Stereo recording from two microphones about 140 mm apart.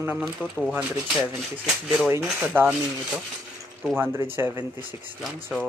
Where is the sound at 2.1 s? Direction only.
20° right (ahead or behind).